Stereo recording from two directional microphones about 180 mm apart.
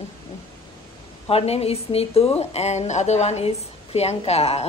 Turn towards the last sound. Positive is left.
turn(degrees=35)  # may be behind; listen again after turning